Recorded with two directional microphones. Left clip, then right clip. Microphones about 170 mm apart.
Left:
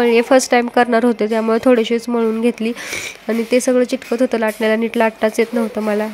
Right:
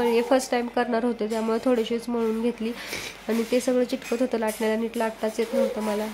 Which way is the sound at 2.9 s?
20° left (ahead or behind).